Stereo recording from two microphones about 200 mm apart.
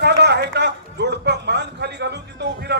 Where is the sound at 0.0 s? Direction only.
55° right (ahead or behind).